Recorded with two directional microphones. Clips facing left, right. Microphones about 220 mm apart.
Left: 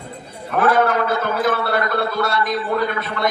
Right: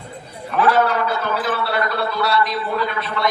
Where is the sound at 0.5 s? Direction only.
50° left (ahead or behind).